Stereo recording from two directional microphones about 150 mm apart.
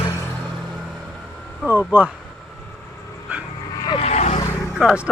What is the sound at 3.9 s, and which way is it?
Vehicle, 45° left (ahead or behind).